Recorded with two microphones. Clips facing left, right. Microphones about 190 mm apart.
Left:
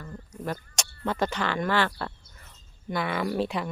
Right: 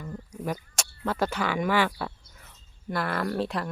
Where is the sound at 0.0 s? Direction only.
15° right (ahead or behind).